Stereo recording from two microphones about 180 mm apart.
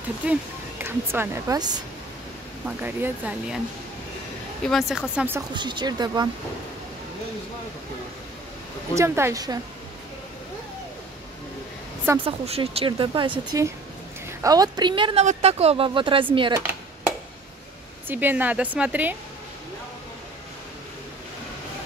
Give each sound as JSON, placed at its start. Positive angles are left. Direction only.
{"t": 0.2, "sound": "speech", "side_deg": -10}
{"t": 4.6, "sound": "speech", "side_deg": 0}
{"t": 5.5, "sound": "speech", "side_deg": -25}
{"t": 8.9, "sound": "speech", "side_deg": -15}
{"t": 12.3, "sound": "speech", "side_deg": -30}
{"t": 18.0, "sound": "speech", "side_deg": -10}